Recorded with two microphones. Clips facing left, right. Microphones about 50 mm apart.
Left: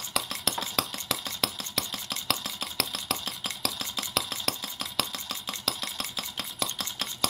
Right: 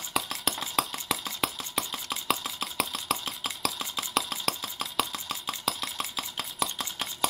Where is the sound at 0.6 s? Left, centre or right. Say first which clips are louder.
Right 2 dB; centre.